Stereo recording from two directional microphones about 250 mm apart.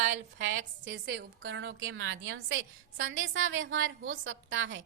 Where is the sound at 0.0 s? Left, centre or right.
Right.